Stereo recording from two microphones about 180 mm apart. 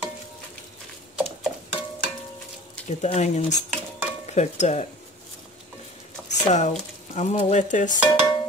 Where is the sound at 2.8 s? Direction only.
40° left (ahead or behind).